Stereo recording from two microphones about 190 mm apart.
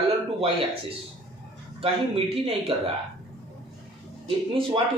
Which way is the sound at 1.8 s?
30° right (ahead or behind).